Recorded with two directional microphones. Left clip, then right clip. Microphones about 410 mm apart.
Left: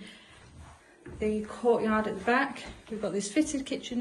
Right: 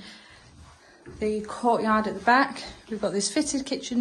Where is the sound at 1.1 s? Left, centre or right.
Centre.